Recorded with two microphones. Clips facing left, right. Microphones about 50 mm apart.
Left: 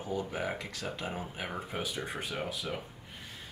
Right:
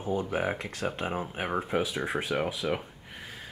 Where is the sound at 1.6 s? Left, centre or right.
Right.